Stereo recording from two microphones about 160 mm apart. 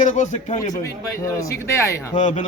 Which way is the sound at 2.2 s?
50° left (ahead or behind).